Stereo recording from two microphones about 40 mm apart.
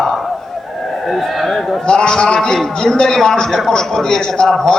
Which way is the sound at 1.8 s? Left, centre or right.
Centre.